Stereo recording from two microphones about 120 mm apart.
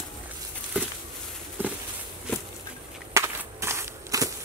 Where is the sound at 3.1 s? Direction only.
25° right (ahead or behind).